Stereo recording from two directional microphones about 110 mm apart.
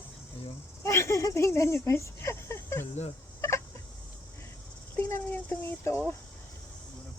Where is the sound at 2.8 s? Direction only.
90° left.